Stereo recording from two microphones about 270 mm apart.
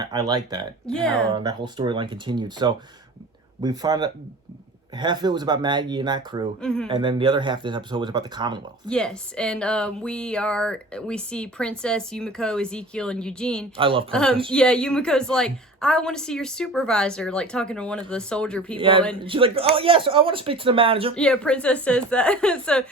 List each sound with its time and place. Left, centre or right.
0.0 s speech: centre
0.9 s speech: centre
1.3 s speech: centre
6.6 s speech: centre
6.8 s speech: centre
8.9 s speech: centre
13.7 s speech: centre
14.1 s speech: centre
18.8 s speech: centre
21.2 s speech: centre